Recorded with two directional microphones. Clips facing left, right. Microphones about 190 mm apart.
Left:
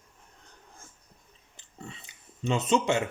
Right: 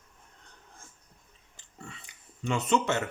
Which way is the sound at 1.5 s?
20° left (ahead or behind).